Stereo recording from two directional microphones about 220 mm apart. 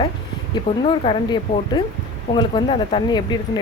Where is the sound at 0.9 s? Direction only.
20° left (ahead or behind).